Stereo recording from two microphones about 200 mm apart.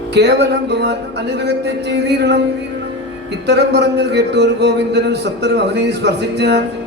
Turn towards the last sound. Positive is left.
turn(degrees=-55)  # may be behind; listen again after turning